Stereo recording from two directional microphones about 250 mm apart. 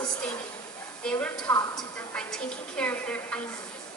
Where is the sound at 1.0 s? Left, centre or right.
Centre.